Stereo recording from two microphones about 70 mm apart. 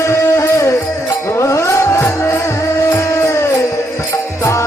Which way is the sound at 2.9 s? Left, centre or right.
Left.